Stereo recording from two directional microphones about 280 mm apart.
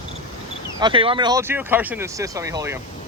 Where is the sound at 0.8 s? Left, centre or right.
Centre.